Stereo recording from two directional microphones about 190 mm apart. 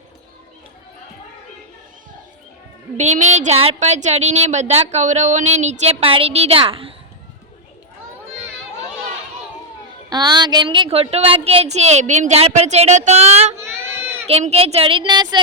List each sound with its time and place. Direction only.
3.0 s speech: 40° right (ahead or behind)
10.1 s speech: 20° right (ahead or behind)
13.6 s child singing: 10° right (ahead or behind)
14.3 s speech: 30° right (ahead or behind)